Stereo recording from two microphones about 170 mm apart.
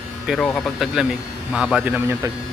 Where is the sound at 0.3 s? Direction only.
5° left (ahead or behind).